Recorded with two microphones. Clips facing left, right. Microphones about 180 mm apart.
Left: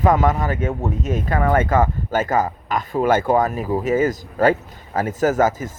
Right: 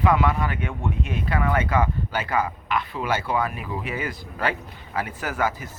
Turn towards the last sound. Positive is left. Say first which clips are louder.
# left 9 dB
turn(degrees=45)  # may be behind; listen again after turning